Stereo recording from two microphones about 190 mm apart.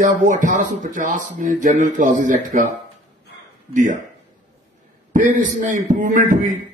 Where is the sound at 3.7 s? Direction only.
45° right (ahead or behind).